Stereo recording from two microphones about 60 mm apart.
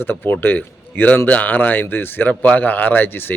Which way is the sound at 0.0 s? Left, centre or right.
Left.